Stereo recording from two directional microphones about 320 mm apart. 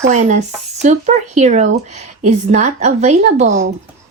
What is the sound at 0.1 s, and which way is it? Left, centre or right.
Speech, right.